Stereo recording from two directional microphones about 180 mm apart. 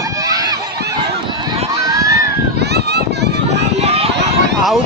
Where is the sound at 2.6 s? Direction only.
65° right (ahead or behind).